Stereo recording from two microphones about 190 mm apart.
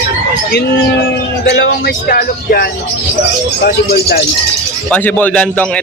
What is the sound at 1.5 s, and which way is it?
Speech, 65° left (ahead or behind).